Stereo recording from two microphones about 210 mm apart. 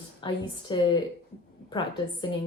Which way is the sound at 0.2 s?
20° left (ahead or behind).